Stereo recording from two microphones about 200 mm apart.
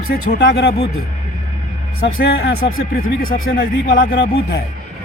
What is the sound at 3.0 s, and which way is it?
Speech, 45° left (ahead or behind).